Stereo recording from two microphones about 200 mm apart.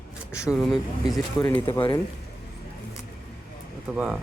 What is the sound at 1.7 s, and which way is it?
Speech, 25° left (ahead or behind).